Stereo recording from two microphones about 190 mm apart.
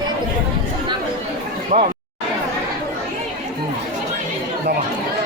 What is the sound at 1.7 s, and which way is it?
Speech, 40° right (ahead or behind).